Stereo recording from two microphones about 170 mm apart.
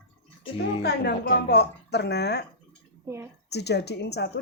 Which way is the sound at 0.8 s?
75° left (ahead or behind).